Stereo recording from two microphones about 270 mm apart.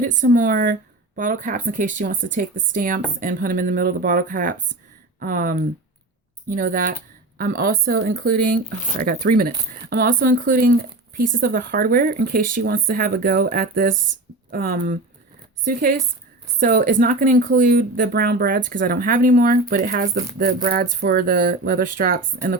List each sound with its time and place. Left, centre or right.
0.0 s speech: right